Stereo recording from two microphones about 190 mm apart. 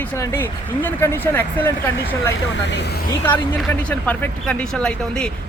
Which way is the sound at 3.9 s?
5° left (ahead or behind).